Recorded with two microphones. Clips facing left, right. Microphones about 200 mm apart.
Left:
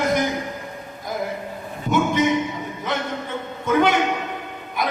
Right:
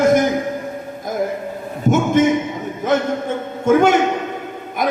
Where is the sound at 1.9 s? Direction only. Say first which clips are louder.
Right 5 dB; 50° right (ahead or behind).